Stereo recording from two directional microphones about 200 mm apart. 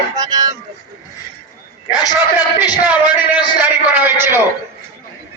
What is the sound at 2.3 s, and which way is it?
A man's voice, 5° right (ahead or behind).